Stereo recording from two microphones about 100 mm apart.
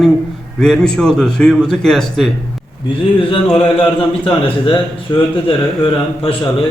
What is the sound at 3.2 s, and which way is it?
A man's voice, 60° left (ahead or behind).